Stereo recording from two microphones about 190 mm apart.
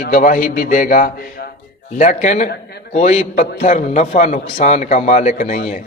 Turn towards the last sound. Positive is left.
turn(degrees=40)  # may be behind; listen again after turning